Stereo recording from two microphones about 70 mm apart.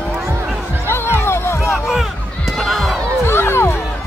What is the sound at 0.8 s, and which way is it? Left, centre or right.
Music, left.